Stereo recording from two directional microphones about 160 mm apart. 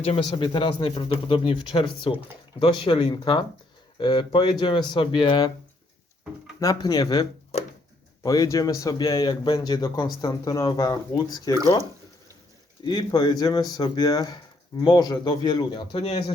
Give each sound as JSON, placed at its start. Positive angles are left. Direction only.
{"t": 0.0, "sound": "a man's voice", "side_deg": 35}
{"t": 6.6, "sound": "a man's voice", "side_deg": 25}
{"t": 12.8, "sound": "a man's voice", "side_deg": 25}